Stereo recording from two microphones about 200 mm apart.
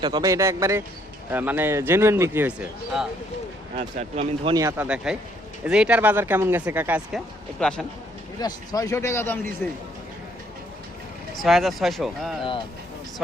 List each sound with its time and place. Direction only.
0.0 s a man's voice: 20° right (ahead or behind); by 3.1 s 5° right (ahead or behind)
3.8 s speech: 30° right (ahead or behind)
4.5 s a man's voice: 15° right (ahead or behind)
5.6 s a man's voice: 5° right (ahead or behind)
7.6 s speech: 5° left (ahead or behind)
8.4 s a man's voice: 20° left (ahead or behind)
11.4 s speech: centre (ahead or behind)
12.4 s speech: 25° left (ahead or behind)